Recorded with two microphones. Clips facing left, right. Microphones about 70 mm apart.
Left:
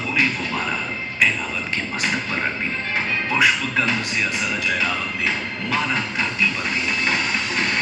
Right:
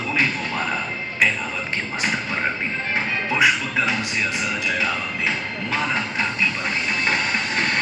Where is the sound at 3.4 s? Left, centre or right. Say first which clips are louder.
Even; centre.